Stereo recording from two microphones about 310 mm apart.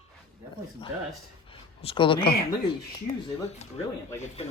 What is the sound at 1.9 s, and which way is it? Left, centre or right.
Speech, centre.